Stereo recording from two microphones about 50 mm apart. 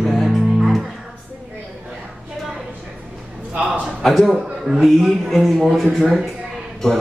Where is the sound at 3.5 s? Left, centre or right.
Centre.